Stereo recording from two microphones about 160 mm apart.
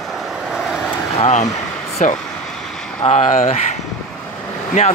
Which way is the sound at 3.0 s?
45° left (ahead or behind).